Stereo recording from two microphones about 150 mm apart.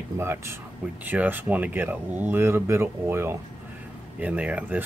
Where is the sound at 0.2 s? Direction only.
15° right (ahead or behind).